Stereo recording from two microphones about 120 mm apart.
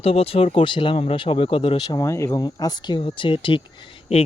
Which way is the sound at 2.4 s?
35° left (ahead or behind).